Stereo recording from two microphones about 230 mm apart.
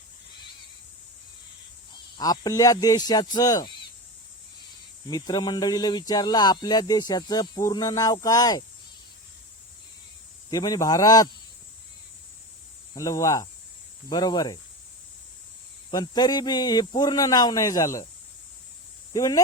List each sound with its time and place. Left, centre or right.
2.1 s speech: centre
5.0 s speech: centre
10.5 s speech: centre
12.9 s speech: centre
15.9 s speech: centre
19.1 s speech: centre